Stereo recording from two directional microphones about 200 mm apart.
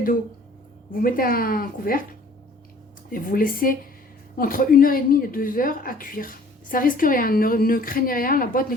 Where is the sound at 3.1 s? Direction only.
45° left (ahead or behind).